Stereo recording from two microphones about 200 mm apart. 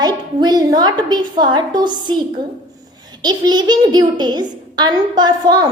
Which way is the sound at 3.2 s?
20° right (ahead or behind).